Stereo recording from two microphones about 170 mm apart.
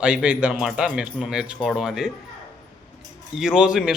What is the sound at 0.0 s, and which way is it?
Speech, 5° right (ahead or behind).